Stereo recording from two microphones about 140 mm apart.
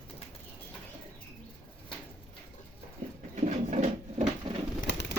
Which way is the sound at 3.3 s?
60° right (ahead or behind).